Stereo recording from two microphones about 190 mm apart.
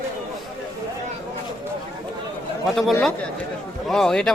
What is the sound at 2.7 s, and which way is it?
A man's voice, centre (ahead or behind).